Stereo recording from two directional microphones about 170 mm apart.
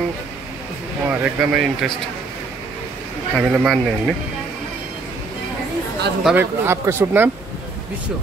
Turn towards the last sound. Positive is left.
turn(degrees=-15)  # may be behind; listen again after turning